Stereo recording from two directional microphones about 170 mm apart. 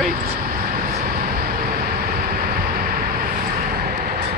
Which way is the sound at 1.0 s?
60° right (ahead or behind).